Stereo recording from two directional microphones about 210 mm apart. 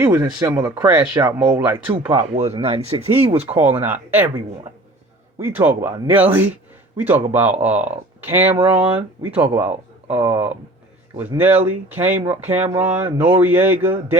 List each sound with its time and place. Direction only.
0.2 s speech: 10° right (ahead or behind)
1.9 s speech: 25° right (ahead or behind)
3.5 s speech: 10° right (ahead or behind)